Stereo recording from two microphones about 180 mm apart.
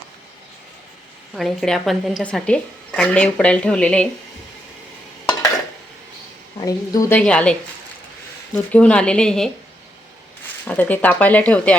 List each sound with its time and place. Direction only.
1.3 s a woman's voice: centre (ahead or behind)
6.6 s a woman's voice: 20° left (ahead or behind)
7.2 s speech: 5° left (ahead or behind)
8.5 s a woman's voice: 5° left (ahead or behind)
10.7 s speech: 10° left (ahead or behind)